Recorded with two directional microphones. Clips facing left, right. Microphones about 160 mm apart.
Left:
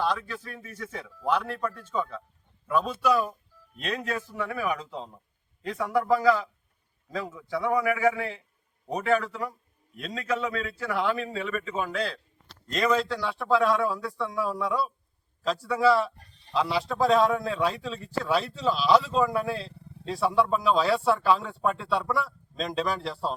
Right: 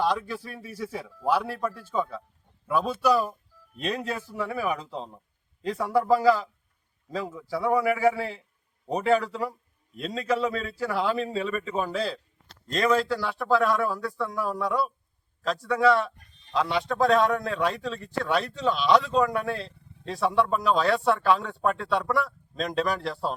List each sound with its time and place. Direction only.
0.0 s a man's voice: 10° right (ahead or behind)
3.8 s a man's voice: 30° right (ahead or behind)
7.3 s a man's voice: 5° right (ahead or behind)
7.5 s a man's voice: 30° right (ahead or behind)
9.9 s a man's voice: 30° right (ahead or behind)
11.9 s a man's voice: 5° right (ahead or behind)